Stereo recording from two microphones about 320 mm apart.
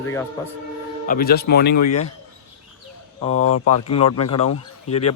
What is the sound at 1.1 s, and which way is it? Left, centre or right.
Speech, left.